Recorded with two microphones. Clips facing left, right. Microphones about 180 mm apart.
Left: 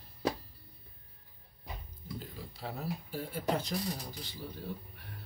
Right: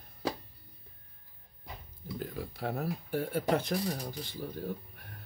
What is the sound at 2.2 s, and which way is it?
Speech, 55° right (ahead or behind).